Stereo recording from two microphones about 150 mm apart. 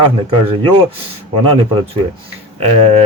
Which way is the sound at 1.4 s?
40° right (ahead or behind).